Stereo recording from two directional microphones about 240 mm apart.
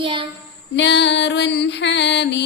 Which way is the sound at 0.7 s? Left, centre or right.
Left.